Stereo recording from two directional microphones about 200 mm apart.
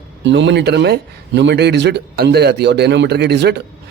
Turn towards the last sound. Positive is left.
turn(degrees=-55)  # may be behind; listen again after turning